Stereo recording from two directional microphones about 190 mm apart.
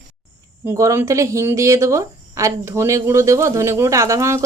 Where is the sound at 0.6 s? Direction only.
15° right (ahead or behind).